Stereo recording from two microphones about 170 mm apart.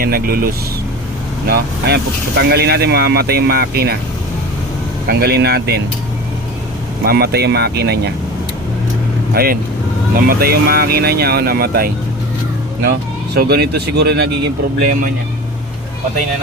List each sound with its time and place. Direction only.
0.0 s speech: 60° right (ahead or behind)
1.5 s speech: 70° right (ahead or behind)
5.0 s speech: 70° right (ahead or behind)
7.0 s speech: 65° right (ahead or behind)
9.3 s speech: 65° right (ahead or behind)
13.3 s speech: 70° right (ahead or behind)